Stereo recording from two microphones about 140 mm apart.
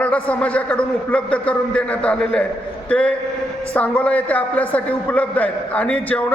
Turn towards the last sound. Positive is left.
turn(degrees=10)  # may be behind; listen again after turning